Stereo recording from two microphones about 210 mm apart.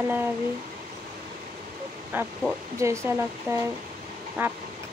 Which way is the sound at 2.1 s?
10° right (ahead or behind).